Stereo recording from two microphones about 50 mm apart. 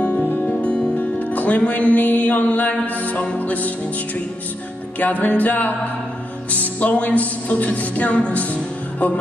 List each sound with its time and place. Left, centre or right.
0.0 s music: left
0.6 s music: left
4.9 s music: left